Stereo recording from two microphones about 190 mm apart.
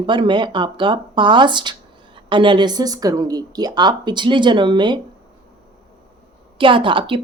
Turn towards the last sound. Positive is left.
turn(degrees=-25)  # may be behind; listen again after turning